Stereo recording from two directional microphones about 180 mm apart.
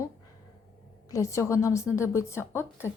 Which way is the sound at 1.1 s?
15° left (ahead or behind).